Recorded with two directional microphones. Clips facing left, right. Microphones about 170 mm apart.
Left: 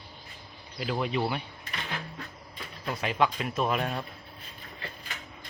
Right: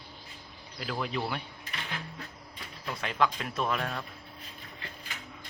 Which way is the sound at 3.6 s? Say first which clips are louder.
Left 2 dB; 20° left (ahead or behind).